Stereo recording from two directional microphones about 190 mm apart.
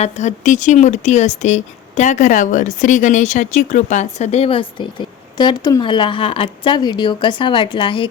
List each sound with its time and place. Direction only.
0.0 s speech: 40° left (ahead or behind)